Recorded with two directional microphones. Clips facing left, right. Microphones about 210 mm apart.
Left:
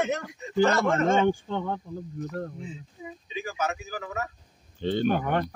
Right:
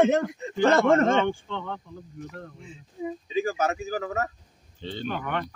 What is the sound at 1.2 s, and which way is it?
Speech, 40° left (ahead or behind).